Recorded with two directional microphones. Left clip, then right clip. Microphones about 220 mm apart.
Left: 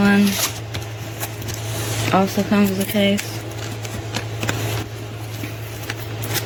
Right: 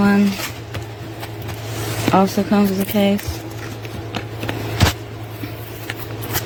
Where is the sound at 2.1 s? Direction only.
20° right (ahead or behind).